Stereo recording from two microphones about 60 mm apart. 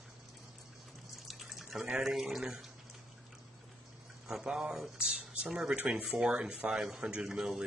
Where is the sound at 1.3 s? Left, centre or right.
Centre.